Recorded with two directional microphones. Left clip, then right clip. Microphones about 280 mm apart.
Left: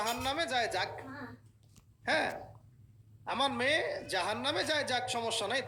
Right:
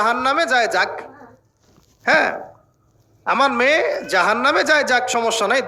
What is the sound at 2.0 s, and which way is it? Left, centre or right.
Speech, right.